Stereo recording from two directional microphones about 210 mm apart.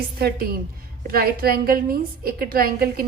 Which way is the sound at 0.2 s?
45° right (ahead or behind).